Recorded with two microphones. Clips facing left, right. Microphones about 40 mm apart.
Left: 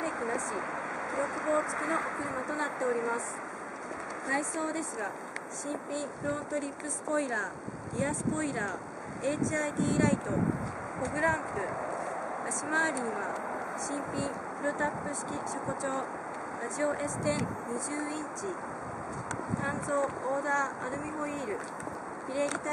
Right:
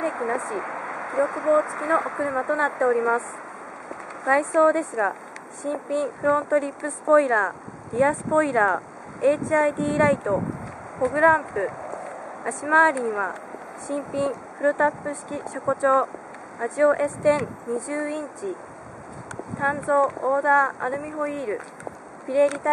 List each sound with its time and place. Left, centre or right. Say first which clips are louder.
0.0 s a sound: right 7 dB; centre
0.4 s speech: right 5 dB; centre
2.1 s speech: right 9 dB; centre
4.3 s speech: right 14 dB; right
19.6 s speech: right 12 dB; right